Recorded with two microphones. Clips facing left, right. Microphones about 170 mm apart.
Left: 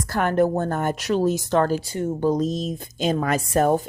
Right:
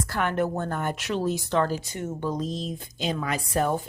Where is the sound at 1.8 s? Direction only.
30° left (ahead or behind).